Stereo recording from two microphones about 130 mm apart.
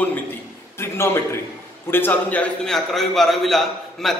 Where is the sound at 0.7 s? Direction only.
20° left (ahead or behind).